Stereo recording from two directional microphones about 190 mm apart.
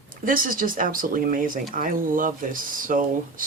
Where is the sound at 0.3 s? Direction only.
45° right (ahead or behind).